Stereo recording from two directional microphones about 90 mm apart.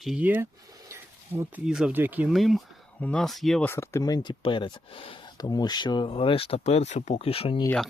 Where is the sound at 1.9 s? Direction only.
20° right (ahead or behind).